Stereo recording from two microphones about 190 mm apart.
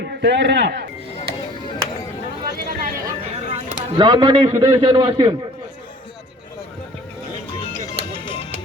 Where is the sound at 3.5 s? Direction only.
25° right (ahead or behind).